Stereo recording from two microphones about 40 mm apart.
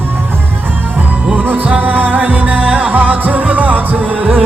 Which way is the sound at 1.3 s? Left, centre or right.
Right.